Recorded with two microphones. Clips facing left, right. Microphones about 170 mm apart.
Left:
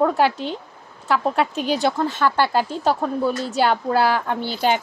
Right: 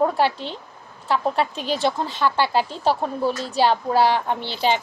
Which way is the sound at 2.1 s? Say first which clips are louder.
Left 1 dB; 50° left (ahead or behind).